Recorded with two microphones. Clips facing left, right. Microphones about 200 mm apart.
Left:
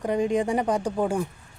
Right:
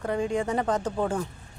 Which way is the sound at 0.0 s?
15° left (ahead or behind).